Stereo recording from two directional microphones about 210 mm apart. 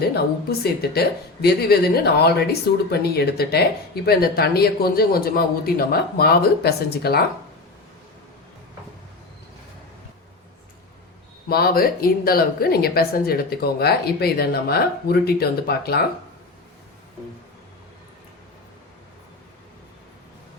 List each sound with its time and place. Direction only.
0.6 s speech: 50° left (ahead or behind)
11.4 s speech: 45° left (ahead or behind)